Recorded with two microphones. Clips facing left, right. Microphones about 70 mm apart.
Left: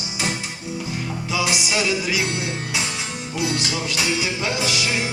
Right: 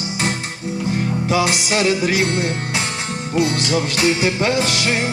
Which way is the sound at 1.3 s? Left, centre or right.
Right.